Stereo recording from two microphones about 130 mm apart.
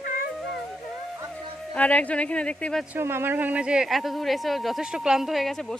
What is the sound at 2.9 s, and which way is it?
Speech, 20° right (ahead or behind).